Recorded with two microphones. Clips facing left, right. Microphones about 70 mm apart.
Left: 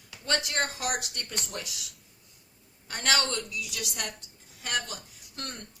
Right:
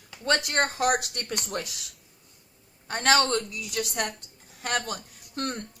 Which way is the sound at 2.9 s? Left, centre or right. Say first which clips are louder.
Right 6 dB; right.